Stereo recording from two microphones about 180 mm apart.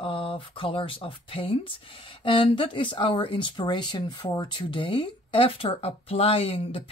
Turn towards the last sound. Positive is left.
turn(degrees=30)  # may be behind; listen again after turning